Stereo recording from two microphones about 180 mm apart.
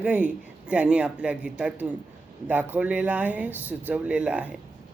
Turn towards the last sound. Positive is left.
turn(degrees=-5)  # may be behind; listen again after turning